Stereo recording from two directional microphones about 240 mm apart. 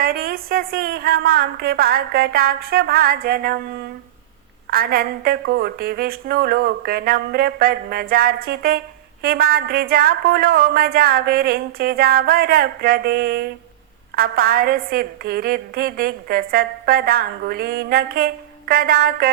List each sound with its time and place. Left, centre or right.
0.0 s a woman's voice: right
4.7 s a woman's voice: right